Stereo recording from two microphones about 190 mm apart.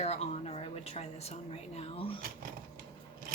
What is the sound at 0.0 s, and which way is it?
A woman's voice, 35° left (ahead or behind).